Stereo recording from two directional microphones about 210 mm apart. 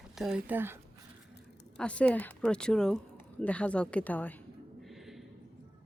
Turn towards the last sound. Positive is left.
turn(degrees=10)  # may be behind; listen again after turning